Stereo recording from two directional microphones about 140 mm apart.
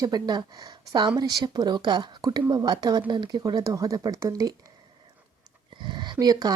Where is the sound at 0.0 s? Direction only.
30° right (ahead or behind).